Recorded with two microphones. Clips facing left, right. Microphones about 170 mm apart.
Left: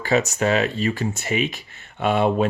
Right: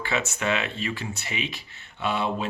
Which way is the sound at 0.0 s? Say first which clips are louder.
Left 8 dB; 40° left (ahead or behind).